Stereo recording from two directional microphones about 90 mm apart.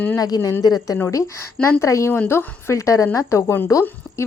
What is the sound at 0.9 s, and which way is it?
A woman's voice, 25° left (ahead or behind).